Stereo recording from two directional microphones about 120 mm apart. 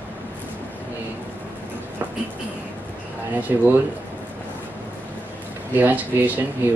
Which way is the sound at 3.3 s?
15° right (ahead or behind).